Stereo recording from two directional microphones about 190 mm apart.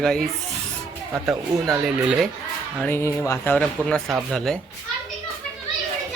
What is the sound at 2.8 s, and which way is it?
Speech, 15° left (ahead or behind).